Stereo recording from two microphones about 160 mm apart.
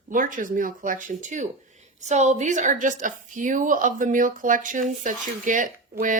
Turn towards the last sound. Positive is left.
turn(degrees=-55)  # may be behind; listen again after turning